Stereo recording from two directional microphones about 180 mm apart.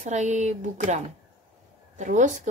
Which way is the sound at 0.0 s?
40° right (ahead or behind).